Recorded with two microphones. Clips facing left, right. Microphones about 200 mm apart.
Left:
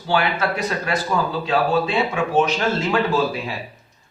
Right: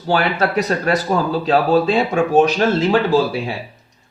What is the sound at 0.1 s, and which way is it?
A man's voice, 40° right (ahead or behind).